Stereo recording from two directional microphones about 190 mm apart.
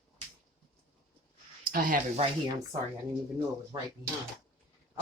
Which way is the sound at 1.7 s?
45° right (ahead or behind).